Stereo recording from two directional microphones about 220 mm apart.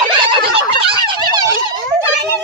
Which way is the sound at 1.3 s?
15° right (ahead or behind).